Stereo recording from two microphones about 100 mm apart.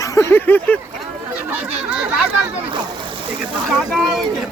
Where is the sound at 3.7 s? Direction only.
Centre (ahead or behind).